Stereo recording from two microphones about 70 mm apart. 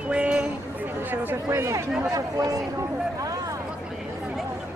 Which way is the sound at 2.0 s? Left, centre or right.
Right.